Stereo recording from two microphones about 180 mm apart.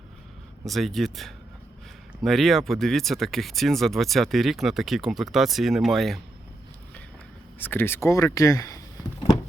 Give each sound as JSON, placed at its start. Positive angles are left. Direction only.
{"t": 0.6, "sound": "speech", "side_deg": 0}
{"t": 7.6, "sound": "speech", "side_deg": 10}